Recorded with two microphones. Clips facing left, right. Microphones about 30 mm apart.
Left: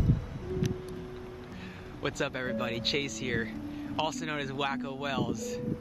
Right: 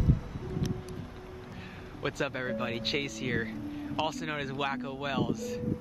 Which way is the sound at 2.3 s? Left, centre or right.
Centre.